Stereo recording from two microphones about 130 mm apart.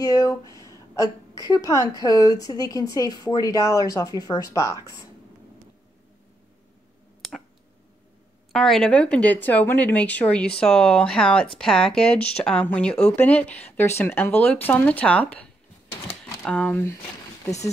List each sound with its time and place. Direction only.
0.0 s a woman's voice: 25° left (ahead or behind)
7.2 s a sound: centre (ahead or behind)
8.5 s speech: 5° left (ahead or behind)